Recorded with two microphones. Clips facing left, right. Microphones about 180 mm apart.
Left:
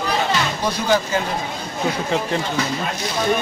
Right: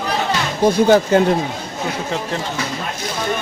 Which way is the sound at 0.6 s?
55° right (ahead or behind).